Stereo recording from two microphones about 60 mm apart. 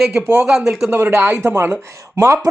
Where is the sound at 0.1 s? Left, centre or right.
Right.